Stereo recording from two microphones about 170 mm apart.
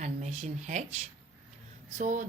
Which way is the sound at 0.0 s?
45° right (ahead or behind).